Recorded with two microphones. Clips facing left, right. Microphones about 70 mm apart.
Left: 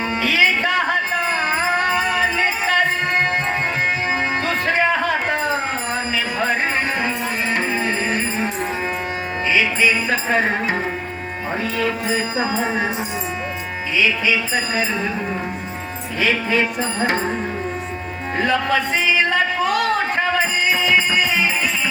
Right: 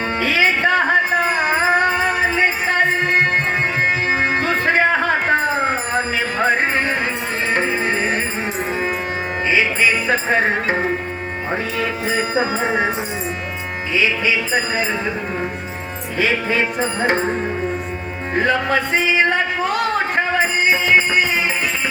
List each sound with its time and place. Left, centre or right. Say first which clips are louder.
0.2 s music: right 1 dB; right
4.2 s music: right 3 dB; right
9.5 s music: right 1 dB; right
11.8 s music: left 1 dB; right
14.5 s speech: right 2 dB; right
16.2 s music: even; right
18.3 s music: right 1 dB; right